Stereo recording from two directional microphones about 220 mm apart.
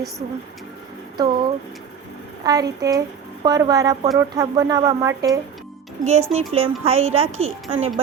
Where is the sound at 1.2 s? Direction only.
20° right (ahead or behind).